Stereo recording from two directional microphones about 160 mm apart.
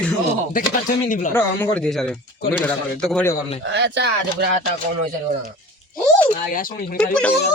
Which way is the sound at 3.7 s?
90° right.